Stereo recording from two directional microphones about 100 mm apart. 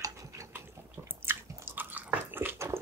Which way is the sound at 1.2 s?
20° right (ahead or behind).